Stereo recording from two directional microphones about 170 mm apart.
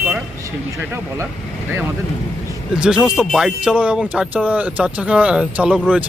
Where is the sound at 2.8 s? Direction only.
5° right (ahead or behind).